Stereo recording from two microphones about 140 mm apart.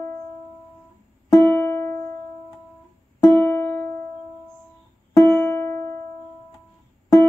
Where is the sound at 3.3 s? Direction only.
15° left (ahead or behind).